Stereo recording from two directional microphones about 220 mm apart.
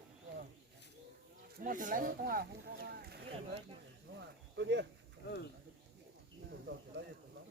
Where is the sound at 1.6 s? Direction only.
35° right (ahead or behind).